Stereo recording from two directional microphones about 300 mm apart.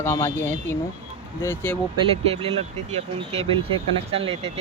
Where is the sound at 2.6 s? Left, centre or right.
Right.